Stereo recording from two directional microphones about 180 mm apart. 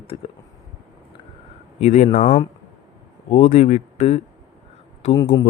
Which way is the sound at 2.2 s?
30° left (ahead or behind).